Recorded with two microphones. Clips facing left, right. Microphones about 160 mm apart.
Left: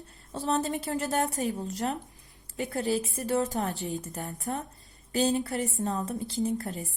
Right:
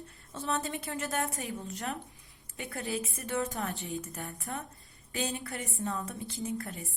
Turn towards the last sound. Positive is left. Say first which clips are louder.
# left 6 dB
turn(degrees=35)  # may be behind; listen again after turning